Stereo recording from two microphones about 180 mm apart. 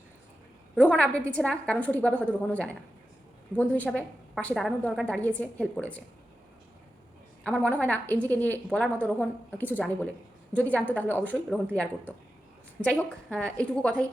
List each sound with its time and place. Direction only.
0.8 s a woman's voice: 5° left (ahead or behind)
7.4 s a woman's voice: 5° left (ahead or behind)